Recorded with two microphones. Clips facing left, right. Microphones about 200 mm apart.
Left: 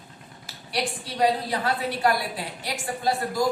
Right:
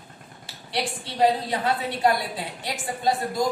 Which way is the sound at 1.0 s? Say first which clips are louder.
Right 2 dB; 25° right (ahead or behind).